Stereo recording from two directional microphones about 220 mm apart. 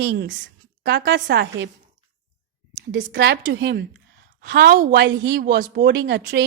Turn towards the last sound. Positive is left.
turn(degrees=-50)  # may be behind; listen again after turning